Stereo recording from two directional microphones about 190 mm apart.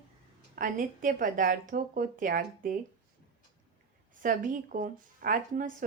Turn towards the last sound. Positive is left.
turn(degrees=-45)  # may be behind; listen again after turning